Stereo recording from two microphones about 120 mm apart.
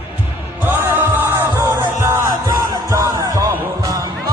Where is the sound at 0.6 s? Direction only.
20° right (ahead or behind).